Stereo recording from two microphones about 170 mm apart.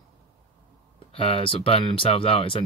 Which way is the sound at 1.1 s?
30° left (ahead or behind).